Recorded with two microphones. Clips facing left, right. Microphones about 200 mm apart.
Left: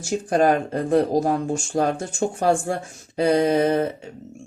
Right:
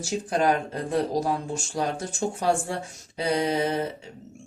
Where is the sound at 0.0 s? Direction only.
50° left (ahead or behind).